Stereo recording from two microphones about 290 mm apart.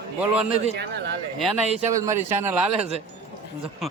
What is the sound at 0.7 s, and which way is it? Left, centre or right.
Speech, right.